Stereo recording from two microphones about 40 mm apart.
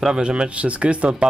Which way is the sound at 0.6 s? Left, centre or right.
Right.